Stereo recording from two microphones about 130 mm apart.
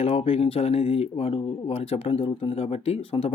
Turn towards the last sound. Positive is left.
turn(degrees=50)  # may be behind; listen again after turning